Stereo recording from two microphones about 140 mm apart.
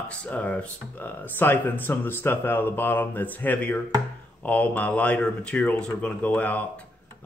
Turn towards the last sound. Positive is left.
turn(degrees=10)  # may be behind; listen again after turning